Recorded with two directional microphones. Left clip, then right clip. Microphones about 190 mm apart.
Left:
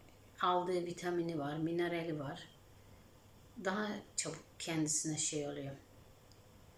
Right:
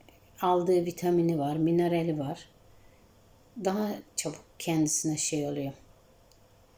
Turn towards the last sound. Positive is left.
turn(degrees=-20)  # may be behind; listen again after turning